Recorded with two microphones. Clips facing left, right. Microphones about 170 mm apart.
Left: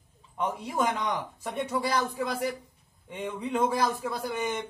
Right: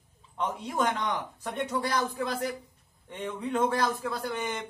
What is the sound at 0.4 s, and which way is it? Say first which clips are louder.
A man's voice: left 1 dB; 10° left (ahead or behind).